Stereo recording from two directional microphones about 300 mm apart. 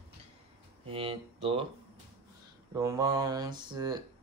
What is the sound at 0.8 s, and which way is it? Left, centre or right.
Speech, centre.